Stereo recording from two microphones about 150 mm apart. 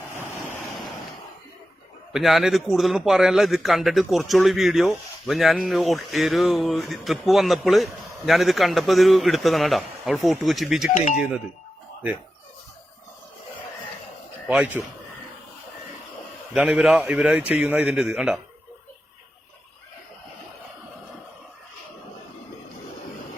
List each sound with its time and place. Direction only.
2.1 s a man's voice: centre (ahead or behind)
10.9 s speech: 55° left (ahead or behind)
11.2 s a man's voice: 5° right (ahead or behind)
14.4 s speech: 10° right (ahead or behind)
16.6 s a man's voice: 5° right (ahead or behind)